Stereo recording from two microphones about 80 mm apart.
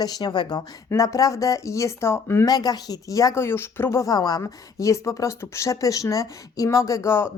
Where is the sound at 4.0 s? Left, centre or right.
Left.